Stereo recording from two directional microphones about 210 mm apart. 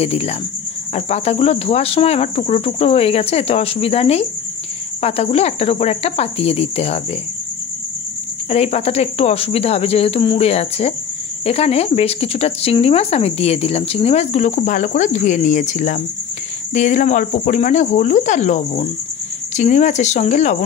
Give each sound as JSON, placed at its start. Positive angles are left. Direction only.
{"t": 0.0, "sound": "speech", "side_deg": 30}
{"t": 8.5, "sound": "speech", "side_deg": 30}